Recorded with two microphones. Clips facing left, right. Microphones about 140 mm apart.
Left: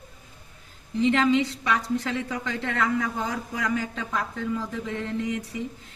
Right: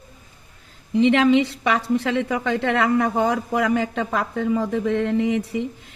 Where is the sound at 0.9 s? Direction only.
80° right.